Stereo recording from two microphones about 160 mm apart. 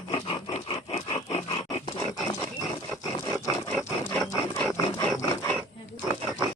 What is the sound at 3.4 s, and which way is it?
Wild animals, 20° left (ahead or behind).